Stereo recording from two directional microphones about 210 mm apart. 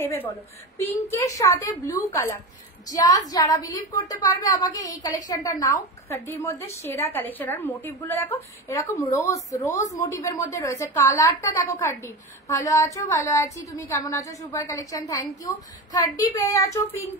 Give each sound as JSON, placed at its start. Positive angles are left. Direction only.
{"t": 0.0, "sound": "a woman's voice", "side_deg": 10}